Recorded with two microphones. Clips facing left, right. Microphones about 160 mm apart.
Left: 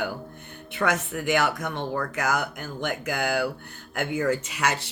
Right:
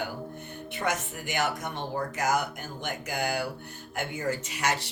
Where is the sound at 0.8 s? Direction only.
70° left (ahead or behind).